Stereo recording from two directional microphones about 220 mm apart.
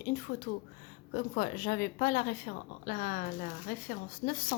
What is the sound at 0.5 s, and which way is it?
Speech, 40° left (ahead or behind).